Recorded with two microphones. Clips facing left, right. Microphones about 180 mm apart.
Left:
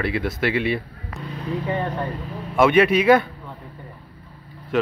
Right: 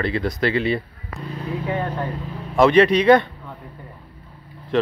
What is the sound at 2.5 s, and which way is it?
Speech, 5° left (ahead or behind).